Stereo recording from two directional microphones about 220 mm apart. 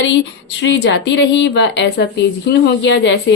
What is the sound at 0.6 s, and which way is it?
A woman's voice, 55° left (ahead or behind).